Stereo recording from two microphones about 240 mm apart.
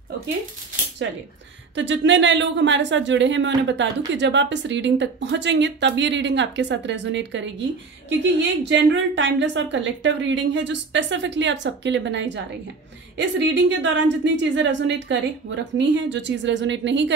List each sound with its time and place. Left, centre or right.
1.8 s speech: right
13.5 s speech: right